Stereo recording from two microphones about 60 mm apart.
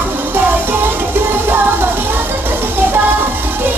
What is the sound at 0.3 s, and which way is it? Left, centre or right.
Music, right.